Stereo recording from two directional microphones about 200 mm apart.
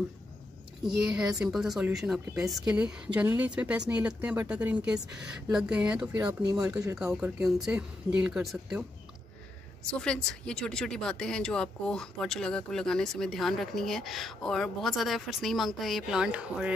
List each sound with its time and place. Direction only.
0.8 s speech: 5° right (ahead or behind)
6.2 s speech: 20° right (ahead or behind)
7.0 s speech: 5° right (ahead or behind)
9.8 s speech: 5° left (ahead or behind)